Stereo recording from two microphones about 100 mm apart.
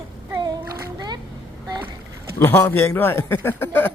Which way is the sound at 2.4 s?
20° left (ahead or behind).